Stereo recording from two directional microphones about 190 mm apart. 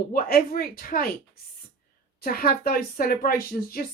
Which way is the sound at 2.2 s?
50° left (ahead or behind).